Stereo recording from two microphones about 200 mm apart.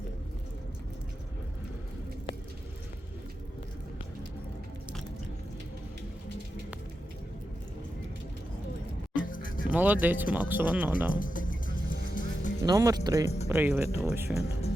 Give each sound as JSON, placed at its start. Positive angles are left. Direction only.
{"t": 9.1, "sound": "music", "side_deg": 45}
{"t": 9.7, "sound": "speech", "side_deg": -10}
{"t": 11.2, "sound": "music", "side_deg": 40}
{"t": 12.6, "sound": "speech", "side_deg": -20}